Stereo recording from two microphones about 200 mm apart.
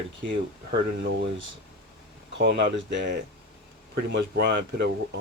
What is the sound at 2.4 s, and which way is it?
Speech, 55° right (ahead or behind).